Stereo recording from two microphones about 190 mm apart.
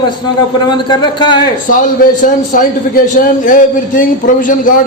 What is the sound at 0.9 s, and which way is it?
Speech, 25° left (ahead or behind).